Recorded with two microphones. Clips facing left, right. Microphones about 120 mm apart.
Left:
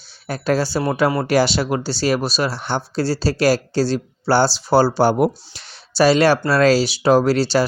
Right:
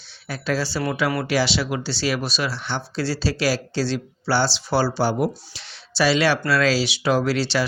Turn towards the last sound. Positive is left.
turn(degrees=40)  # may be behind; listen again after turning